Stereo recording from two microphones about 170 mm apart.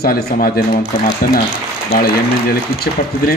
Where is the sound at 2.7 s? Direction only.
60° left (ahead or behind).